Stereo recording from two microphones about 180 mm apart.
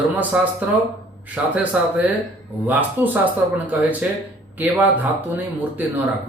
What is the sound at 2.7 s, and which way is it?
Speech, 10° right (ahead or behind).